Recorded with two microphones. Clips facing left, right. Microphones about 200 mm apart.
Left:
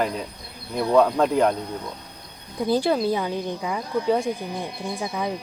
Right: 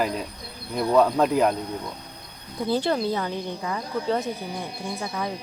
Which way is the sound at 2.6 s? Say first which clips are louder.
Left 3 dB; 10° left (ahead or behind).